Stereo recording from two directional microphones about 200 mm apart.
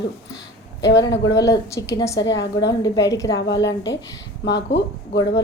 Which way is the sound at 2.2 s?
65° left (ahead or behind).